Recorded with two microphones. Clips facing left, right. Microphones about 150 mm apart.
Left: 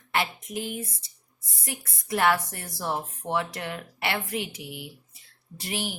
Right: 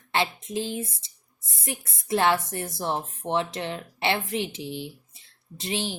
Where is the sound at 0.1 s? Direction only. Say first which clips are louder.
Right 2 dB; 25° right (ahead or behind).